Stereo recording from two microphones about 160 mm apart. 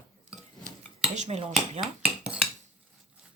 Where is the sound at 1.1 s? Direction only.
45° right (ahead or behind).